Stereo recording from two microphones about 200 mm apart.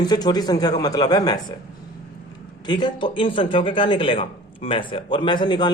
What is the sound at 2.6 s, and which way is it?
Speech, 20° left (ahead or behind).